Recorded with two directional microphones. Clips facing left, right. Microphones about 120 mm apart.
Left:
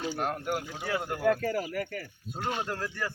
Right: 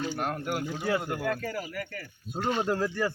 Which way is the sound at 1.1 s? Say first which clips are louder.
Left 4 dB; 25° left (ahead or behind).